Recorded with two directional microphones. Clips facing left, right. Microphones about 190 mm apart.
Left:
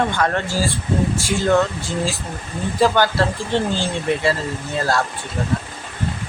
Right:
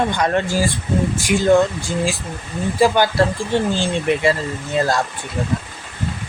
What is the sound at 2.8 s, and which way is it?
Speech, 15° right (ahead or behind).